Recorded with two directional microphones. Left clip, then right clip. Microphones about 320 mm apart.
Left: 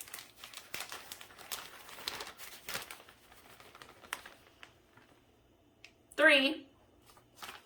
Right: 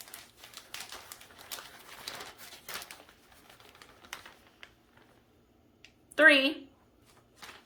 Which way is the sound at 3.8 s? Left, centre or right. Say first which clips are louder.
Left 2 dB; centre.